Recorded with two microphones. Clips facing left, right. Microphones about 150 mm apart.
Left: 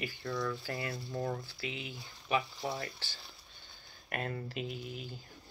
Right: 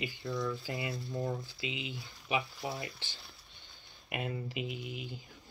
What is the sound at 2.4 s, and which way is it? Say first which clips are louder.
Speech: left 1 dB; centre (ahead or behind).